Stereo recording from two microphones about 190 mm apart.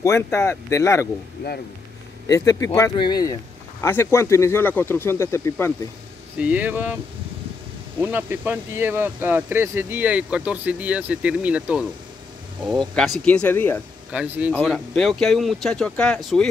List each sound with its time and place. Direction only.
0.0 s speech: 15° left (ahead or behind)
2.2 s speech: 15° left (ahead or behind)
6.3 s speech: 10° right (ahead or behind)
8.0 s speech: 10° right (ahead or behind)
13.2 s speech: 5° left (ahead or behind)
14.1 s speech: 10° right (ahead or behind)
14.5 s speech: 5° left (ahead or behind)